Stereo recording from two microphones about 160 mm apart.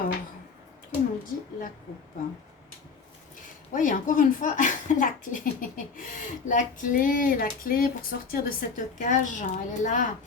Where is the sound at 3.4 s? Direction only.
55° left (ahead or behind).